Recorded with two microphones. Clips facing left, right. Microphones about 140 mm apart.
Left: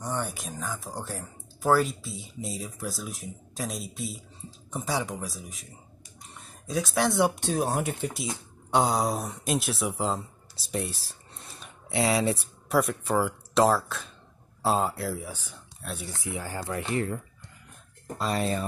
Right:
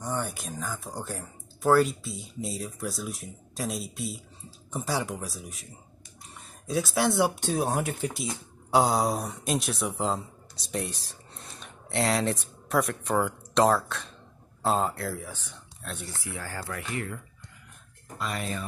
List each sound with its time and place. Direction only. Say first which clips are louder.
0.0 s speech: even; centre (ahead or behind)
6.7 s speech: even; centre (ahead or behind)
16.2 s speech: left 3 dB; 20° left (ahead or behind); by 18.7 s 35° left (ahead or behind)